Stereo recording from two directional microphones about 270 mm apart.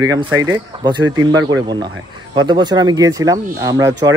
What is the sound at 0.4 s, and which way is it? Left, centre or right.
Speech, centre.